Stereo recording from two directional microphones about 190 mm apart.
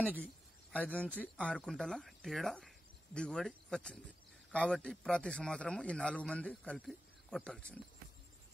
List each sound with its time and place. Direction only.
0.2 s a man's voice: 5° left (ahead or behind)